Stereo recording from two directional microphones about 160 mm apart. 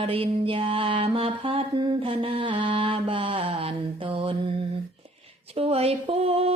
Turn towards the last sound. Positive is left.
turn(degrees=-40)  # may be behind; listen again after turning